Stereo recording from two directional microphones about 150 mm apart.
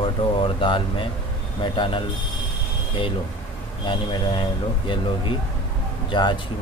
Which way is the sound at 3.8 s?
35° left (ahead or behind).